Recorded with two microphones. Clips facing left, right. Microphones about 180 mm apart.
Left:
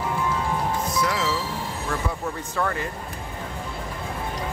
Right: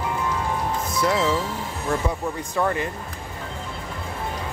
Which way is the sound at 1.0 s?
25° right (ahead or behind).